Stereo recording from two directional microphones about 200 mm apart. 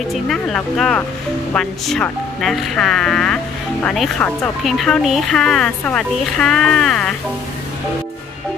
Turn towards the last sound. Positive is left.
turn(degrees=5)  # may be behind; listen again after turning